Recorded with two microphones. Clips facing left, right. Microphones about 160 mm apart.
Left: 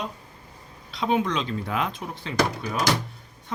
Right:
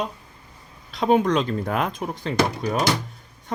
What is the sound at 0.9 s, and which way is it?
Speech, 45° right (ahead or behind).